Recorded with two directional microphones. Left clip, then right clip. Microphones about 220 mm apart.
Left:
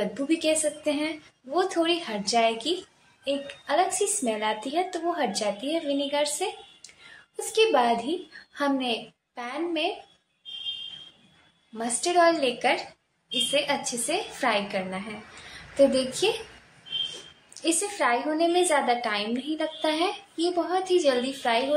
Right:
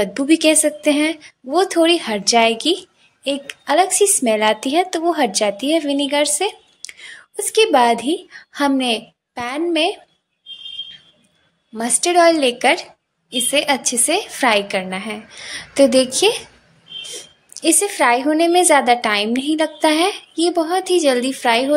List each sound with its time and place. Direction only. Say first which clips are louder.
0.0 s a woman's voice: right 11 dB; 45° right (ahead or behind)
7.5 s a woman's voice: right 8 dB; 45° right (ahead or behind)
11.7 s a woman's voice: right 8 dB; 45° right (ahead or behind)
17.6 s a woman's voice: right 10 dB; 40° right (ahead or behind)